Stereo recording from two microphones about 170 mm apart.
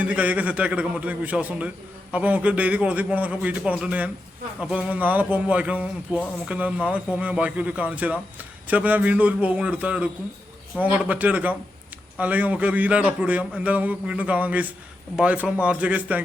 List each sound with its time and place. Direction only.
0.0 s a man's voice: 10° right (ahead or behind)